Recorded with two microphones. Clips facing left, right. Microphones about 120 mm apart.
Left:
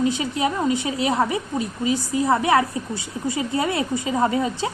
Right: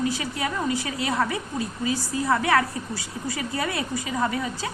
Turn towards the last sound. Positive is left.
turn(degrees=25)  # may be behind; listen again after turning